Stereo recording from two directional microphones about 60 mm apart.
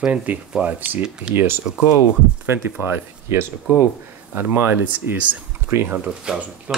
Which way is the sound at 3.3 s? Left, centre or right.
Right.